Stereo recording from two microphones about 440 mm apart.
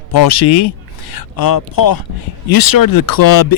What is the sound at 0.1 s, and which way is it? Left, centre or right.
Speech, left.